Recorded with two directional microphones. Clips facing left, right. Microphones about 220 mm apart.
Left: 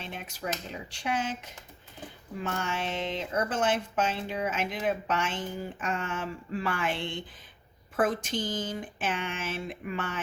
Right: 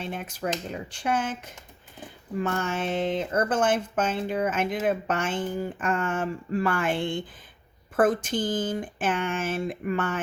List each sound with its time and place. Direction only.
0.0 s speech: 50° right (ahead or behind)
2.4 s speech: 50° right (ahead or behind)